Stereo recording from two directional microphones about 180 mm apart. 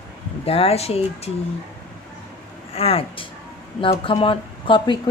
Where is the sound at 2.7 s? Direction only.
30° left (ahead or behind).